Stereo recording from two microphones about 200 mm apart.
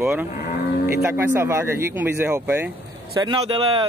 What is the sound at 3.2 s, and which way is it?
Speech, 25° right (ahead or behind).